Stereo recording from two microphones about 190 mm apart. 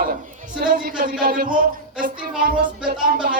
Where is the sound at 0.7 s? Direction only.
55° right (ahead or behind).